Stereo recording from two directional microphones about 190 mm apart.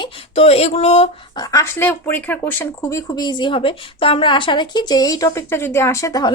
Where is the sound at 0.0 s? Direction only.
30° left (ahead or behind).